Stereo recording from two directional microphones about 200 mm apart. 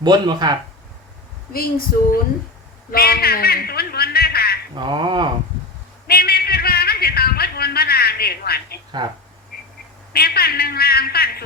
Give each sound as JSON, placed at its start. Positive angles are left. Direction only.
{"t": 0.0, "sound": "speech", "side_deg": -20}
{"t": 1.5, "sound": "a man's voice", "side_deg": 45}
{"t": 4.7, "sound": "speech", "side_deg": -20}
{"t": 6.1, "sound": "a man's voice", "side_deg": 50}
{"t": 10.1, "sound": "a man's voice", "side_deg": 50}